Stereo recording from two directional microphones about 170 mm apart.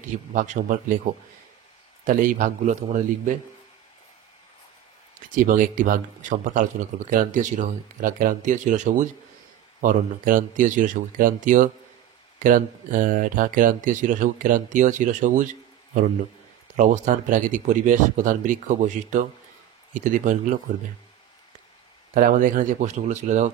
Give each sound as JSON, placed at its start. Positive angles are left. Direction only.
{"t": 0.3, "sound": "speech", "side_deg": -50}
{"t": 2.0, "sound": "speech", "side_deg": -50}
{"t": 5.3, "sound": "speech", "side_deg": -50}
{"t": 16.7, "sound": "speech", "side_deg": -45}
{"t": 22.1, "sound": "speech", "side_deg": -50}